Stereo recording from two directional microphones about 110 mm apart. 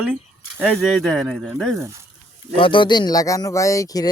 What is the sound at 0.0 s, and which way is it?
Speech, 15° right (ahead or behind).